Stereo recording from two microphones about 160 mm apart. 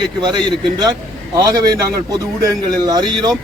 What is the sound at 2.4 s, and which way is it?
Speech, 25° right (ahead or behind).